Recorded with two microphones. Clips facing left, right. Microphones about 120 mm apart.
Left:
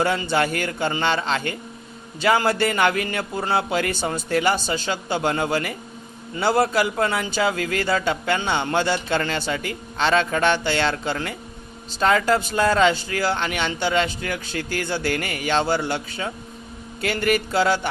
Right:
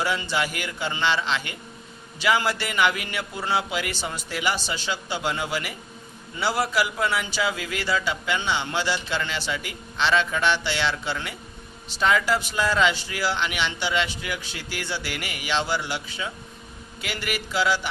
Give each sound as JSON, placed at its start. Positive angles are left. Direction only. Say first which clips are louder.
{"t": 0.0, "sound": "speech", "louder": "left 5 dB", "side_deg": 50}
{"t": 6.7, "sound": "speech", "louder": "left 3 dB", "side_deg": 45}